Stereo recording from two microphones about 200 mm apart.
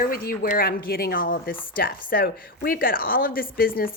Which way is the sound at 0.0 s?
45° left (ahead or behind).